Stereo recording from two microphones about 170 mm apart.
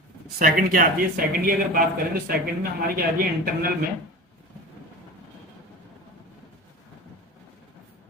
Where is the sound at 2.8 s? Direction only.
60° right (ahead or behind).